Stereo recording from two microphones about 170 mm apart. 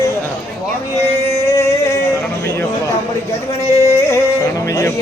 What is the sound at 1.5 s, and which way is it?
Music, 15° left (ahead or behind).